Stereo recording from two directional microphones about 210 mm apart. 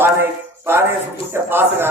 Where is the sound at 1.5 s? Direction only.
10° right (ahead or behind).